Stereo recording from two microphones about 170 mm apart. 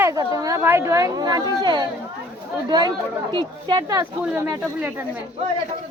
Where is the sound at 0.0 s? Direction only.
20° right (ahead or behind).